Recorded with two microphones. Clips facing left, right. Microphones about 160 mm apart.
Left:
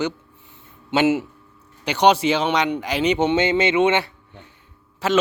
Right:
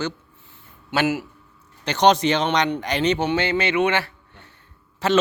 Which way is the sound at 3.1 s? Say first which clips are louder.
Left 3 dB; 20° left (ahead or behind).